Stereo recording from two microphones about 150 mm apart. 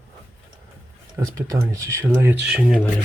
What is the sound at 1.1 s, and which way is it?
Speech, 20° right (ahead or behind).